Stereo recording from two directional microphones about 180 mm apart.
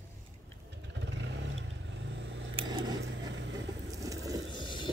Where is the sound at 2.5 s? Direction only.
25° right (ahead or behind).